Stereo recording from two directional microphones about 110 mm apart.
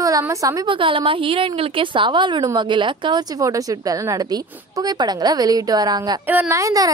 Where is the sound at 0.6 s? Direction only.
50° right (ahead or behind).